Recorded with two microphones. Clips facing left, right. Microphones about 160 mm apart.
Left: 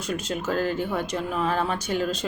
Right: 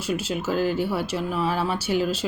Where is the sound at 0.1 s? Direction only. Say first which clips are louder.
Right 2 dB; 5° right (ahead or behind).